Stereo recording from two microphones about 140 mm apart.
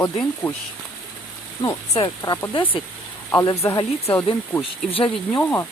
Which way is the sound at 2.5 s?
35° left (ahead or behind).